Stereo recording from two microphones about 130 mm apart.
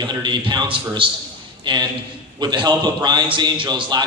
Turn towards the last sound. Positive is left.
turn(degrees=-35)  # may be behind; listen again after turning